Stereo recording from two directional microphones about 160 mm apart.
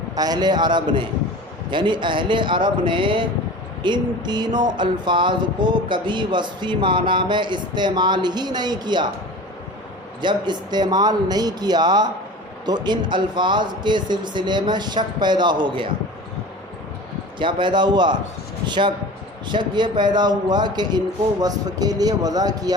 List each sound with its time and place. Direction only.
0.2 s speech: 25° right (ahead or behind)
10.2 s speech: 30° right (ahead or behind)
17.4 s speech: 30° right (ahead or behind)